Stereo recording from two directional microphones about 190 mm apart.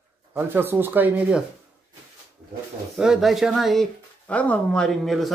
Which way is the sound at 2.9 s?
Centre (ahead or behind).